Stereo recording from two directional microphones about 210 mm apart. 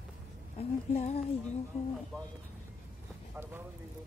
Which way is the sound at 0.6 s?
30° left (ahead or behind).